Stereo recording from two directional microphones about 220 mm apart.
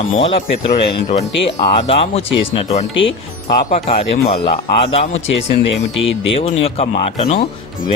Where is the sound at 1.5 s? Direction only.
25° left (ahead or behind).